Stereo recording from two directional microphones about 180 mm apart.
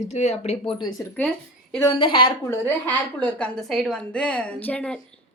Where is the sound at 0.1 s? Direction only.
35° left (ahead or behind).